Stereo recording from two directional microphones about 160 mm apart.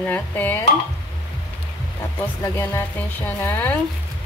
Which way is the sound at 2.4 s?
15° left (ahead or behind).